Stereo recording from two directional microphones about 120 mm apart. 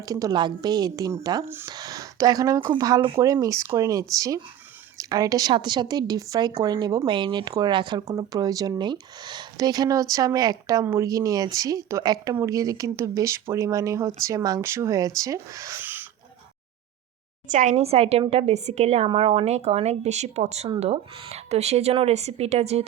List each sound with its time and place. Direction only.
0.0 s speech: 30° right (ahead or behind)
15.8 s a sound: 15° right (ahead or behind)
17.5 s a woman's voice: 90° right; by 22.8 s 65° right (ahead or behind)